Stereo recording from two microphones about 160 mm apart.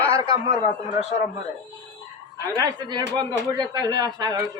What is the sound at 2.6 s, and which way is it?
Speech, 25° right (ahead or behind).